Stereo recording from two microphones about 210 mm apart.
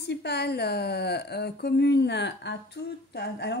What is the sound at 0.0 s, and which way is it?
Speech, 50° left (ahead or behind).